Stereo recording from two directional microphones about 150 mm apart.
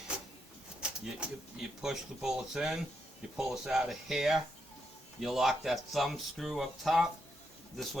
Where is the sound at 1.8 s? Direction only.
5° right (ahead or behind).